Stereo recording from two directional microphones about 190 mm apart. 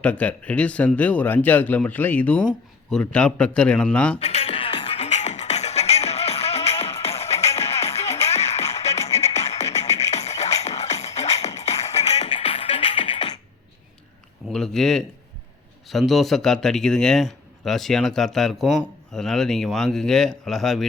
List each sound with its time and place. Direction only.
0.0 s speech: 5° left (ahead or behind)
4.2 s music: 35° left (ahead or behind)
14.5 s a sound: centre (ahead or behind)
15.9 s speech: centre (ahead or behind)